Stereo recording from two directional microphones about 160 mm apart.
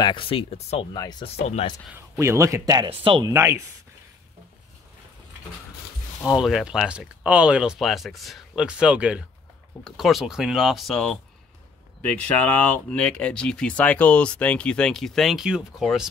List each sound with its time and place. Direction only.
0.0 s speech: 30° left (ahead or behind)
2.0 s speech: 15° right (ahead or behind)
2.9 s speech: 30° right (ahead or behind)
6.2 s speech: 5° right (ahead or behind)